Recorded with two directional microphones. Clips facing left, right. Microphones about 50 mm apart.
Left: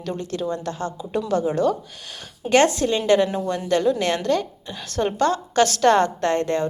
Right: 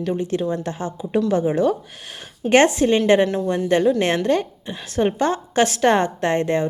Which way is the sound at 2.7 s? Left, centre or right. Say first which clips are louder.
Right 3 dB; right.